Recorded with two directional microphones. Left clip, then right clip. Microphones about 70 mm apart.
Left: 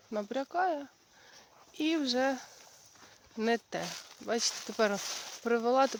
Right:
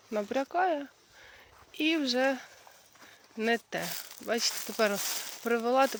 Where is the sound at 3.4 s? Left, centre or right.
Left.